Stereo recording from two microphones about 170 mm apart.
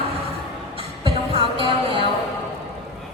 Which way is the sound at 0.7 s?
30° right (ahead or behind).